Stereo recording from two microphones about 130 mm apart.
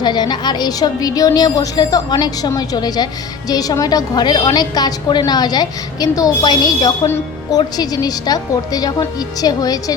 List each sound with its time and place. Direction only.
0.0 s a woman's voice: 35° left (ahead or behind)